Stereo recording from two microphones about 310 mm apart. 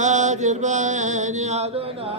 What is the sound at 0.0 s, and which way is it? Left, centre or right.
Mantra, right.